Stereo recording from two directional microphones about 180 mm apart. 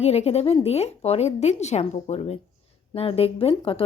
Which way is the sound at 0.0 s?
35° left (ahead or behind).